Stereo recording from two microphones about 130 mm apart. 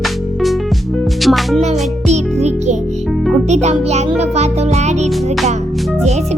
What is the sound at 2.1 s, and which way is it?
Music, 60° right (ahead or behind).